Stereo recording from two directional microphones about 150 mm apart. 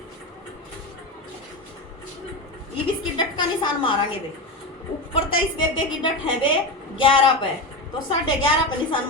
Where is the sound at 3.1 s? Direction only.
30° left (ahead or behind).